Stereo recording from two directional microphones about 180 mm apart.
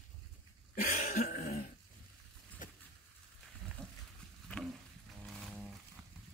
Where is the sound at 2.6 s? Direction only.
45° left (ahead or behind).